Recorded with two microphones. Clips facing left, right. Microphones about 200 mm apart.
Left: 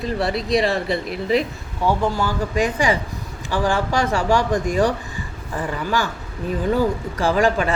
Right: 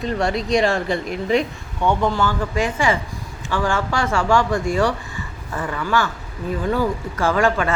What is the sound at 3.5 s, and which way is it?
Speech, 15° left (ahead or behind).